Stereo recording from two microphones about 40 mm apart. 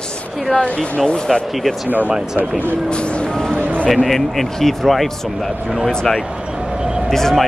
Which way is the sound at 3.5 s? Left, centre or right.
Right.